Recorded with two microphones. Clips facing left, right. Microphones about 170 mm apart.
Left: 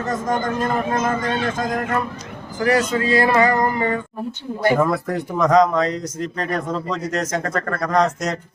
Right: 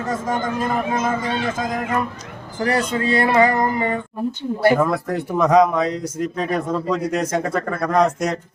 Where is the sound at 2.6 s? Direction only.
30° right (ahead or behind).